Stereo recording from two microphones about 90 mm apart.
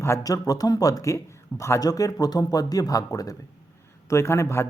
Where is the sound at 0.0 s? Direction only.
35° left (ahead or behind).